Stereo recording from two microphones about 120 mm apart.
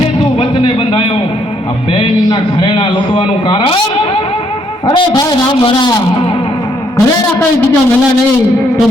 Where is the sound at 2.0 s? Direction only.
45° left (ahead or behind).